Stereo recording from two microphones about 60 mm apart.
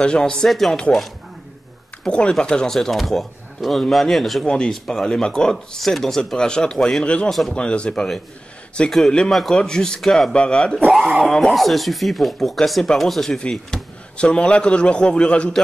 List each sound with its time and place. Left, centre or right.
0.0 s a man's voice: centre
2.0 s a man's voice: centre
7.2 s speech: centre
7.5 s a man's voice: centre
9.3 s speech: centre
9.6 s a man's voice: centre
10.3 s a man's voice: centre